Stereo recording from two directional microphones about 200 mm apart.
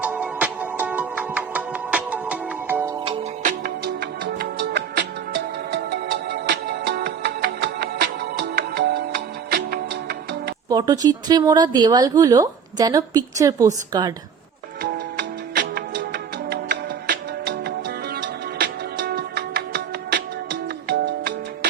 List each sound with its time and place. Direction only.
0.0 s music: 5° right (ahead or behind)
2.9 s music: 25° right (ahead or behind)
3.4 s music: 50° right (ahead or behind)
10.7 s speech: 20° right (ahead or behind)
14.8 s music: 45° right (ahead or behind)
20.8 s music: 60° right (ahead or behind)